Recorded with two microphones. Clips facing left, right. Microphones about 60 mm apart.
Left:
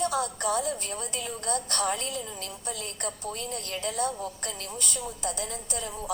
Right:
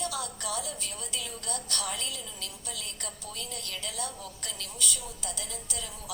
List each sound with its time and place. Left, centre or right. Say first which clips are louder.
0.0 s a woman's voice: left 7 dB; left